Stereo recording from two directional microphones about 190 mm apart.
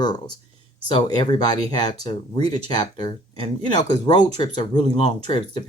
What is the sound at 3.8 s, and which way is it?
Speech, 25° left (ahead or behind).